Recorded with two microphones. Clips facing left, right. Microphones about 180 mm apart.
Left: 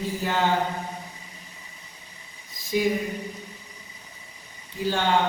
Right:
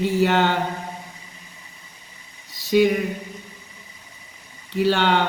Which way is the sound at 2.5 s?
75° right (ahead or behind).